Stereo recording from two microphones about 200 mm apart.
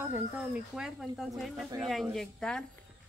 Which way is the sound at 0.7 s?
Centre (ahead or behind).